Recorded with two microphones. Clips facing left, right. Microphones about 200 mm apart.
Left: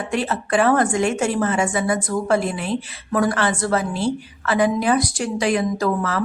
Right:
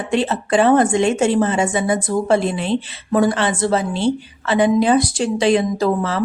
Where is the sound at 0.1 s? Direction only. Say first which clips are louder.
Right 4 dB; 25° right (ahead or behind).